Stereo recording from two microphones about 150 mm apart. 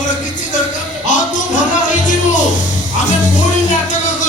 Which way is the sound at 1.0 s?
55° left (ahead or behind).